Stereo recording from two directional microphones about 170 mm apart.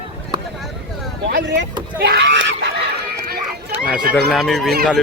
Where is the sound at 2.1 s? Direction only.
90° right.